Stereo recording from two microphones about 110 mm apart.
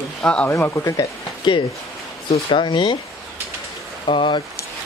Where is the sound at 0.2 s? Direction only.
10° left (ahead or behind).